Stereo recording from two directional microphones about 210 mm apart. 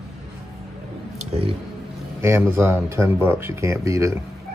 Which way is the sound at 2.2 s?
10° right (ahead or behind).